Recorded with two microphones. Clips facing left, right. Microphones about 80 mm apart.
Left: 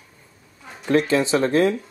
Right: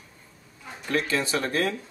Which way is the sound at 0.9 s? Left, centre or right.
Left.